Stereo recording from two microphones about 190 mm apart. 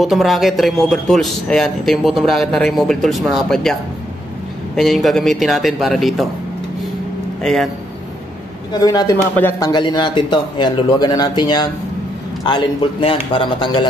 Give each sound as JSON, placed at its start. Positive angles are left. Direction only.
{"t": 0.0, "sound": "a man's voice", "side_deg": 0}
{"t": 4.7, "sound": "a man's voice", "side_deg": 0}
{"t": 8.7, "sound": "speech", "side_deg": 20}
{"t": 13.0, "sound": "speech", "side_deg": 30}